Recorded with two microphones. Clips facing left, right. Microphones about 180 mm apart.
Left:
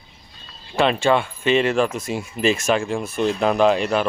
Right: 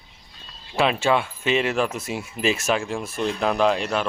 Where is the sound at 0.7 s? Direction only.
5° right (ahead or behind).